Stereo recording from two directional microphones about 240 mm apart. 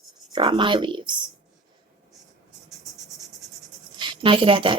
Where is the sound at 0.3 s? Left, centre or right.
Centre.